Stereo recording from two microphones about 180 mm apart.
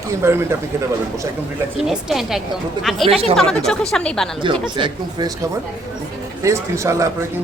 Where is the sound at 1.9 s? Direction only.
Centre (ahead or behind).